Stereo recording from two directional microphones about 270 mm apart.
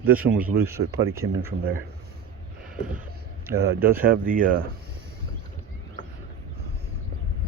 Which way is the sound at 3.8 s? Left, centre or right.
Right.